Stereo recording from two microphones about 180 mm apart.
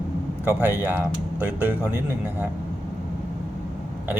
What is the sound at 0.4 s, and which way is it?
Speech, 10° right (ahead or behind).